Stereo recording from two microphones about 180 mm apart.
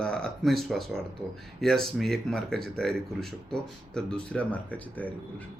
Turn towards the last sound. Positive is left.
turn(degrees=10)  # may be behind; listen again after turning